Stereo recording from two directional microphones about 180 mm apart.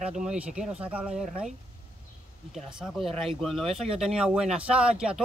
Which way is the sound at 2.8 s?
Centre (ahead or behind).